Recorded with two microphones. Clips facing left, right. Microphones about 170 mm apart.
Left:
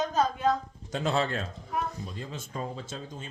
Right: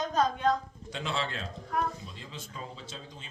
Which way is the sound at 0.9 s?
45° left (ahead or behind).